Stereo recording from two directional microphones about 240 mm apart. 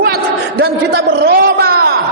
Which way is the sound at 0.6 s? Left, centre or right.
Right.